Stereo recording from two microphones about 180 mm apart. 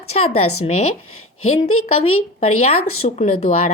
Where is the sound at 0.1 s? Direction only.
35° left (ahead or behind).